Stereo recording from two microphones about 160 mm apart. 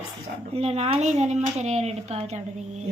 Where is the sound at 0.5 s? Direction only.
40° right (ahead or behind).